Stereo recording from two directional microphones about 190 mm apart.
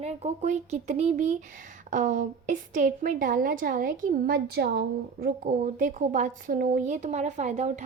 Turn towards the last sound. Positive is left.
turn(degrees=-40)  # may be behind; listen again after turning